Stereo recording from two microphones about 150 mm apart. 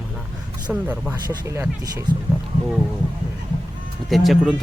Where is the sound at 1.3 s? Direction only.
20° right (ahead or behind).